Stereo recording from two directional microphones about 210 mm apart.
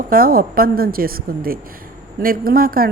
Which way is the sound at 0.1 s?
45° right (ahead or behind).